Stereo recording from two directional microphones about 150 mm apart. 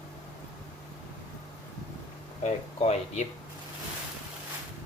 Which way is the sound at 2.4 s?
50° left (ahead or behind).